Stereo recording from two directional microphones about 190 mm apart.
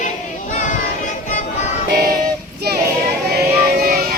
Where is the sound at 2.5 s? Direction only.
55° right (ahead or behind).